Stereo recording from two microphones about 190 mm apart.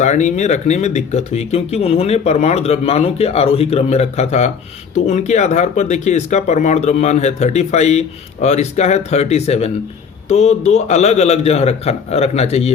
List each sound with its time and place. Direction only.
0.0 s speech: 40° left (ahead or behind)